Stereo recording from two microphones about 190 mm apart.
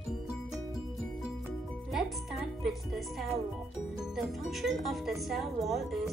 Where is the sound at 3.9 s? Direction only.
5° right (ahead or behind).